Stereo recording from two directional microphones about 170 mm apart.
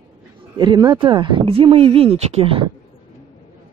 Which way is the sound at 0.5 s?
25° right (ahead or behind).